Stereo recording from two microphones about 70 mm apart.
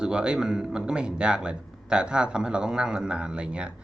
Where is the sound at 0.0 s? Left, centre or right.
Centre.